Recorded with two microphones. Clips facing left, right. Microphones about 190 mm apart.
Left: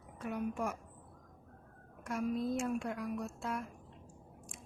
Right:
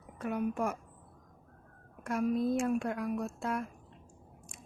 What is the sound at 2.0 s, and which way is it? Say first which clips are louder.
A woman's voice: right 5 dB; 60° right (ahead or behind).